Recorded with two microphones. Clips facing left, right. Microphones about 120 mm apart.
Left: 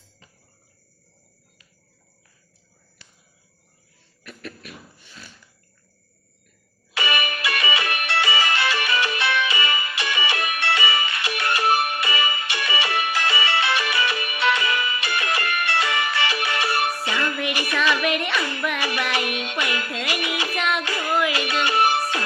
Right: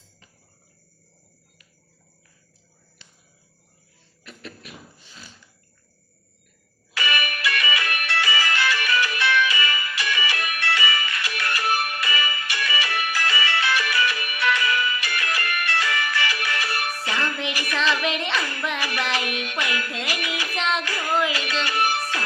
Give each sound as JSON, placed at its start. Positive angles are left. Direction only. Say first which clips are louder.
{"t": 3.0, "sound": "a sound", "louder": "left 1 dB", "side_deg": -20}
{"t": 4.2, "sound": "a sound", "louder": "left 3 dB", "side_deg": -25}
{"t": 6.9, "sound": "music", "louder": "left 2 dB", "side_deg": 25}
{"t": 17.5, "sound": "child singing", "louder": "left 3 dB", "side_deg": 20}
{"t": 18.3, "sound": "music", "louder": "left 2 dB", "side_deg": 20}
{"t": 20.7, "sound": "child singing", "louder": "right 1 dB", "side_deg": 20}
{"t": 21.6, "sound": "music", "louder": "left 5 dB", "side_deg": 25}